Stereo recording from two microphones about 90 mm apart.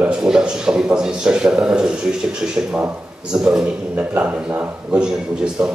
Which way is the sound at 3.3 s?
5° right (ahead or behind).